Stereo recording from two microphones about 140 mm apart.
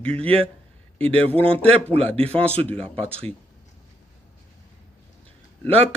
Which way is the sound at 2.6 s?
10° left (ahead or behind).